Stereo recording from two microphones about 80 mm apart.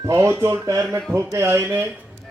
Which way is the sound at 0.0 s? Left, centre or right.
Right.